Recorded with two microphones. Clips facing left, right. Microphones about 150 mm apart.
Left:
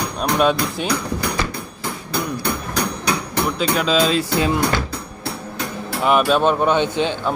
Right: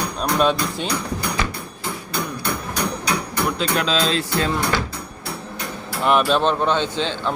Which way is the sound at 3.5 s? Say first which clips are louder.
Left 5 dB; 5° left (ahead or behind).